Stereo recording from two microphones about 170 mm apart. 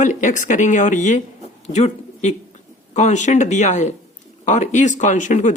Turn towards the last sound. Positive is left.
turn(degrees=45)  # may be behind; listen again after turning